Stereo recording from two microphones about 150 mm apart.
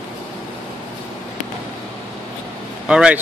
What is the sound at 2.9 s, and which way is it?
Speech, 5° right (ahead or behind).